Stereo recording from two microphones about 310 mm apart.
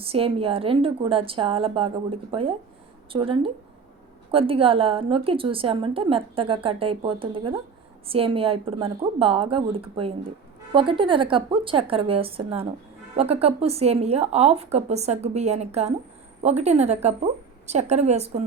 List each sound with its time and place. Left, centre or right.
0.0 s a woman's voice: centre